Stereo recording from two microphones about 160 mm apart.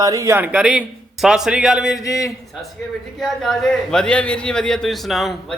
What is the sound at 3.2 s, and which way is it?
A man's voice, centre (ahead or behind).